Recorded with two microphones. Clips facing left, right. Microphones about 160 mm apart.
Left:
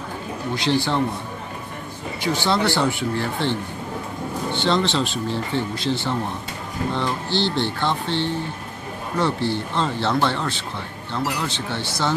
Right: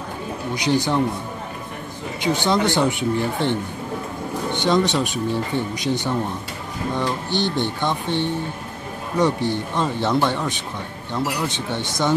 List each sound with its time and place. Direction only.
0.6 s speech: 15° right (ahead or behind)
2.2 s speech: 15° right (ahead or behind)